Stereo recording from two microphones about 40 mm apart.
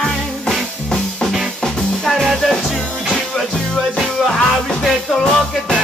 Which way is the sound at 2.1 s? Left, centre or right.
Centre.